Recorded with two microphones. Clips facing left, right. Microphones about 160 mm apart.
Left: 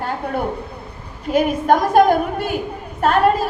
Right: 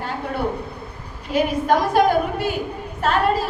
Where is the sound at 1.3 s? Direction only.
50° left (ahead or behind).